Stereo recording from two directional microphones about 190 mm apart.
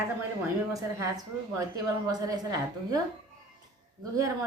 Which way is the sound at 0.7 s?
15° right (ahead or behind).